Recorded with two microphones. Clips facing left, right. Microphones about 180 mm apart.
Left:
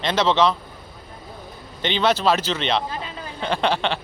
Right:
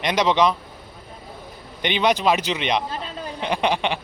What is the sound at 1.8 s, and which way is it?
Speech, 15° right (ahead or behind).